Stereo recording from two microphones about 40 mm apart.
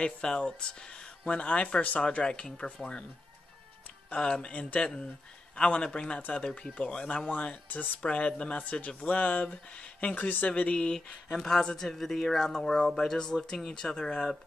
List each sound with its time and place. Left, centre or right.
0.4 s speech: left
4.1 s speech: left
7.2 s speech: left
11.3 s speech: centre